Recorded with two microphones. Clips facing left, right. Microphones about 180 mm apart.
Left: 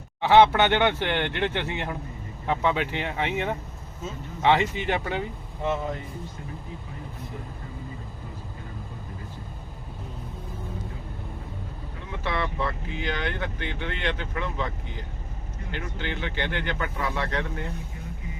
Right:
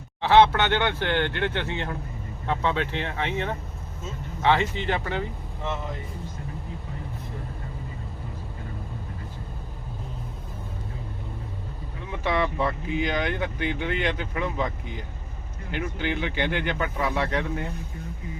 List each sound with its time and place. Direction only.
0.2 s speech: 15° left (ahead or behind)
12.2 s speech: 15° right (ahead or behind)
15.7 s speech: 15° right (ahead or behind)